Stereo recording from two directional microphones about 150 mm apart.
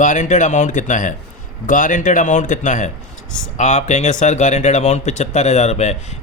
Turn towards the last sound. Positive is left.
turn(degrees=50)  # may be behind; listen again after turning